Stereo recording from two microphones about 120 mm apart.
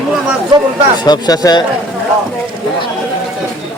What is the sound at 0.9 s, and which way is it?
Speech, 35° left (ahead or behind).